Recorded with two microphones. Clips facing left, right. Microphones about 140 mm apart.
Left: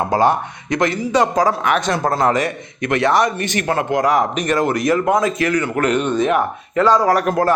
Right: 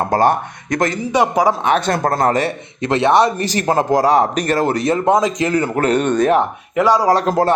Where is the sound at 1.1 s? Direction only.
10° right (ahead or behind).